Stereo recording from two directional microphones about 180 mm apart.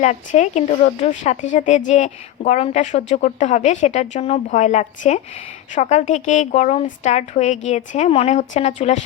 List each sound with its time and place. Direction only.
0.0 s a woman's voice: 40° left (ahead or behind)